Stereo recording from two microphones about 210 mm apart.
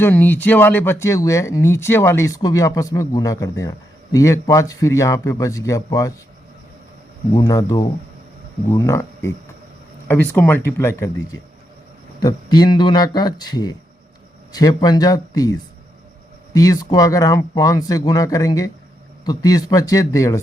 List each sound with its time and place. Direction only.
0.0 s speech: 10° left (ahead or behind)
7.3 s speech: 15° left (ahead or behind)